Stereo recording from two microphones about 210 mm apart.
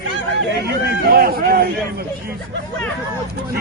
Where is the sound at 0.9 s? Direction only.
45° right (ahead or behind).